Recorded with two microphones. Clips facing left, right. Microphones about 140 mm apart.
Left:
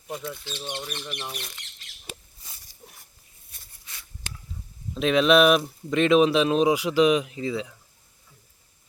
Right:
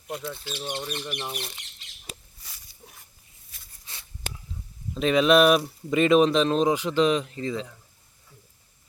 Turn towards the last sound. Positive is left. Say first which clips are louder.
# left 1 dB
turn(degrees=5)  # may be behind; listen again after turning